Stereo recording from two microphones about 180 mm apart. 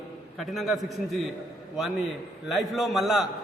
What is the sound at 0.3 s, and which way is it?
Speech, centre (ahead or behind).